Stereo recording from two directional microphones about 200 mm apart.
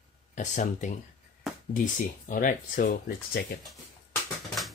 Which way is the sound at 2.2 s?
40° left (ahead or behind).